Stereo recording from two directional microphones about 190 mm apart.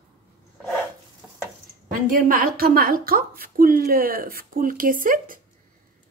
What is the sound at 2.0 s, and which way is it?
Speech, 50° right (ahead or behind).